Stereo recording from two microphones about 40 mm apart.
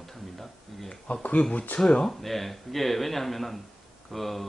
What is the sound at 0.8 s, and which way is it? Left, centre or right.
Speech, left.